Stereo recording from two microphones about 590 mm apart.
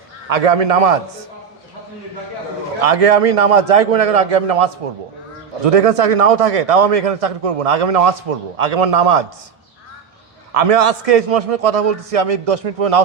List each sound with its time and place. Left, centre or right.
0.3 s a man's voice: right
2.8 s a man's voice: right
10.5 s a man's voice: right